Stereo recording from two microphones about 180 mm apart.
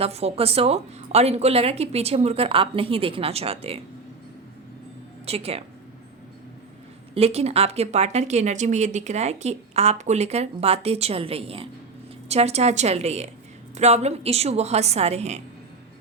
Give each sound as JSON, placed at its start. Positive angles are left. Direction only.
{"t": 0.0, "sound": "speech", "side_deg": -35}
{"t": 5.2, "sound": "speech", "side_deg": -35}
{"t": 7.1, "sound": "speech", "side_deg": -35}